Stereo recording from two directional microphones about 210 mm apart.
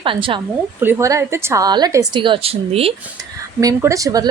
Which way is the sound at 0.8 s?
10° right (ahead or behind).